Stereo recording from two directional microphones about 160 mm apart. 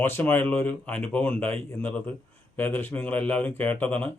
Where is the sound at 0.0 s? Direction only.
15° left (ahead or behind).